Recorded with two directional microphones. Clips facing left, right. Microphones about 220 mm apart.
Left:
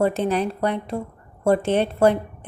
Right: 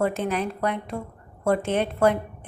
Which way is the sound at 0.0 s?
30° left (ahead or behind).